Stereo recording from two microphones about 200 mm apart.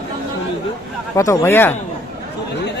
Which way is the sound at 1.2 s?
15° left (ahead or behind).